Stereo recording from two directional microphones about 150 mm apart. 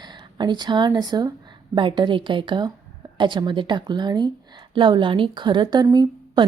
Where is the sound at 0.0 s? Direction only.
30° right (ahead or behind).